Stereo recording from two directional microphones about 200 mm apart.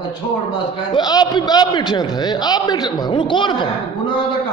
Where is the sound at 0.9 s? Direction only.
20° left (ahead or behind).